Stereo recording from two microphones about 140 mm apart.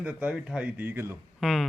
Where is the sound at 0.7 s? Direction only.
15° right (ahead or behind).